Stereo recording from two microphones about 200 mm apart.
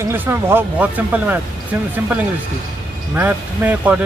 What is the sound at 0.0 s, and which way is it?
Speech, 10° right (ahead or behind).